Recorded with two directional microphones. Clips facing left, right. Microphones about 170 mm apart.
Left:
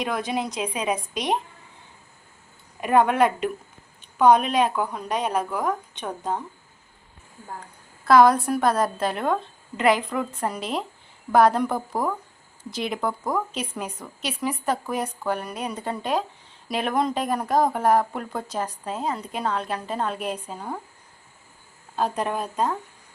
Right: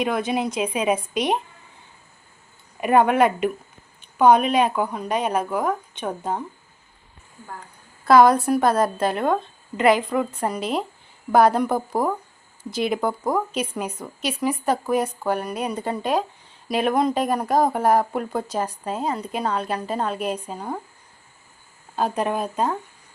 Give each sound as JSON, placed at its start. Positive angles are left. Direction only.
{"t": 0.0, "sound": "speech", "side_deg": 0}
{"t": 2.8, "sound": "speech", "side_deg": -5}
{"t": 8.0, "sound": "speech", "side_deg": 0}
{"t": 13.1, "sound": "speech", "side_deg": -25}
{"t": 13.5, "sound": "speech", "side_deg": -5}
{"t": 21.9, "sound": "speech", "side_deg": -5}